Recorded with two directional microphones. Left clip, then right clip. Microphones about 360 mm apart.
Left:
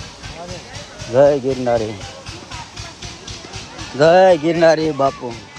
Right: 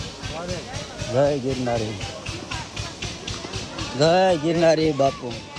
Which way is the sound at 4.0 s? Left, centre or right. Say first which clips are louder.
Left 8 dB; left.